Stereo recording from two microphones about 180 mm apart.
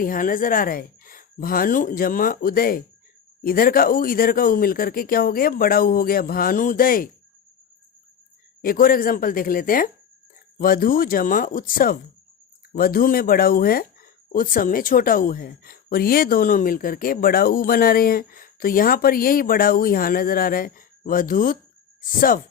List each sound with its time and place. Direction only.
0.0 s speech: 50° left (ahead or behind)
8.6 s speech: 50° left (ahead or behind)